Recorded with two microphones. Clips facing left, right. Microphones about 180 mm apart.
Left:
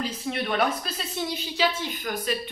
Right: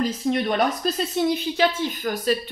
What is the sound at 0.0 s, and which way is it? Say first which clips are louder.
A woman's voice: right 7 dB; 40° right (ahead or behind).